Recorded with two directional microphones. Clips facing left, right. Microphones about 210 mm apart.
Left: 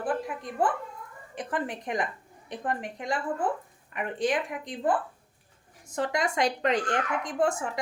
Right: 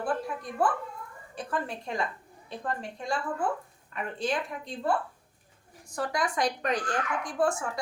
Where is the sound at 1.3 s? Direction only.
20° left (ahead or behind).